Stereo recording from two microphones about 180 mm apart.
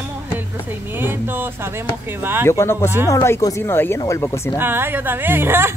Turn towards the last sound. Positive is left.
turn(degrees=-15)  # may be behind; listen again after turning